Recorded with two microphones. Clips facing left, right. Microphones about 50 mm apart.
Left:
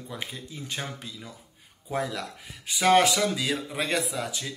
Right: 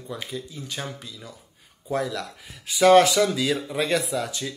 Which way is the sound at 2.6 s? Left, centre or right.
Centre.